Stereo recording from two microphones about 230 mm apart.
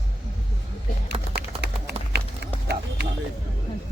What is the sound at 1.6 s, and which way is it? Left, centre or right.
Run, right.